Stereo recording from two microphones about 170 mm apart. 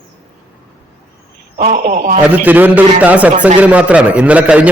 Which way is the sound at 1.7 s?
60° right (ahead or behind).